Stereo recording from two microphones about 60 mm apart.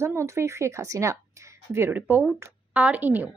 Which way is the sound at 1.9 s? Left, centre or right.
Right.